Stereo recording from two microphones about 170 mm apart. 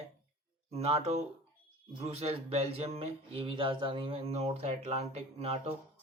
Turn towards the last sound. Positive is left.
turn(degrees=-40)  # may be behind; listen again after turning